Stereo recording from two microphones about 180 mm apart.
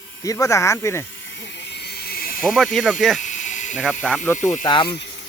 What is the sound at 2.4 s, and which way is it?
Speech, centre (ahead or behind).